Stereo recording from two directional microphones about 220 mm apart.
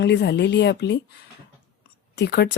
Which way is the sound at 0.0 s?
50° left (ahead or behind).